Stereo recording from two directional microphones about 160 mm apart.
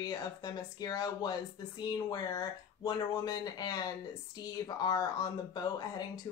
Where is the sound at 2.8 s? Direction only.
25° left (ahead or behind).